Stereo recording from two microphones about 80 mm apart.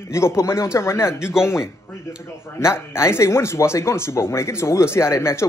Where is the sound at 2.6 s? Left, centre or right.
Left.